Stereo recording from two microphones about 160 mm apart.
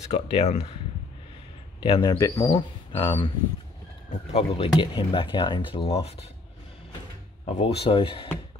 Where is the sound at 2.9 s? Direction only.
30° left (ahead or behind).